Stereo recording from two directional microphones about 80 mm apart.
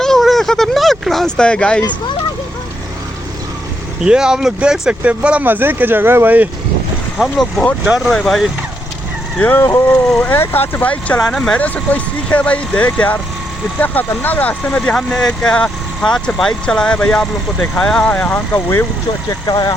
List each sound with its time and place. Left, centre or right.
0.0 s a sound: centre
4.0 s speech: centre
7.2 s speech: centre
8.1 s speech: centre
9.4 s speech: left
11.3 s speech: centre
18.5 s speech: left
19.3 s speech: left